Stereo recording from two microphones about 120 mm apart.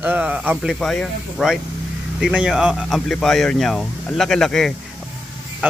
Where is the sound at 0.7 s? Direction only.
5° left (ahead or behind).